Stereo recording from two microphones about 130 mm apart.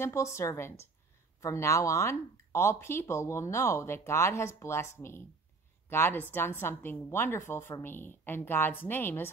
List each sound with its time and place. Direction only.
0.0 s a woman's voice: 20° left (ahead or behind)